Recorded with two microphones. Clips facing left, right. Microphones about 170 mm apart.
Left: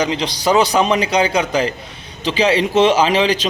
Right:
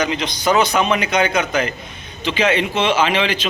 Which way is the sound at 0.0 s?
30° left (ahead or behind).